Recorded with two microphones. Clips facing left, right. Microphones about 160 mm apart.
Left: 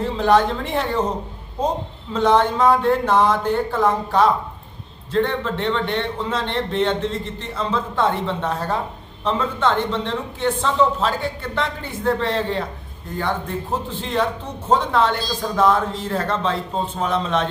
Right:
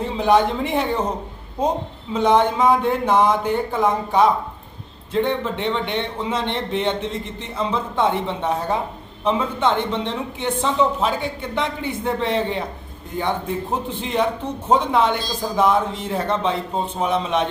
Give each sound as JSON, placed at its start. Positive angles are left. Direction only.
{"t": 0.0, "sound": "a man's voice", "side_deg": -15}
{"t": 2.1, "sound": "a man's voice", "side_deg": -15}
{"t": 14.0, "sound": "a man's voice", "side_deg": -15}